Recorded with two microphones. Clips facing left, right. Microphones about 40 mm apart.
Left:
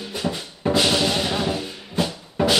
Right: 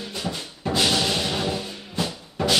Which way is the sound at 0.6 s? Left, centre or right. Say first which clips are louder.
Left 3 dB; centre.